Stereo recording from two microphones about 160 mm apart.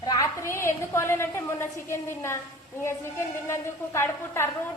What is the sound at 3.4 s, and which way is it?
A woman's voice, 15° left (ahead or behind).